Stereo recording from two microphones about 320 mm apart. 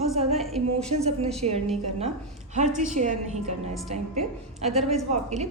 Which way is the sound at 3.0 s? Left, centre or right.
Right.